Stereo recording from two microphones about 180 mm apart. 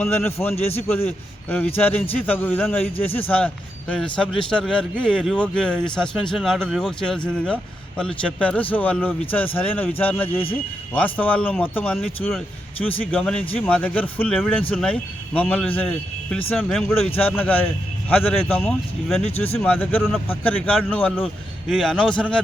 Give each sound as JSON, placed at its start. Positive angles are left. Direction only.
{"t": 0.0, "sound": "a man's voice", "side_deg": 15}
{"t": 13.1, "sound": "a man's voice", "side_deg": 5}
{"t": 19.2, "sound": "speech", "side_deg": 35}
{"t": 19.5, "sound": "a man's voice", "side_deg": 10}